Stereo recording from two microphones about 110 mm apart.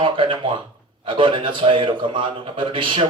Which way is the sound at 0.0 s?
50° right (ahead or behind).